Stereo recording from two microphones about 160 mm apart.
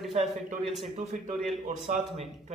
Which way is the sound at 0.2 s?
45° right (ahead or behind).